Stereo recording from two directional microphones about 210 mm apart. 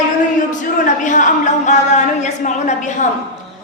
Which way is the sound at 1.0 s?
35° left (ahead or behind).